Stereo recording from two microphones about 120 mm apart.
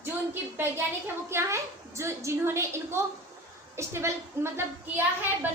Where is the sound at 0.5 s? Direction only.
15° right (ahead or behind).